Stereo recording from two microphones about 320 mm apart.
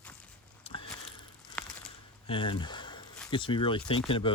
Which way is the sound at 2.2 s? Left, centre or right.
Centre.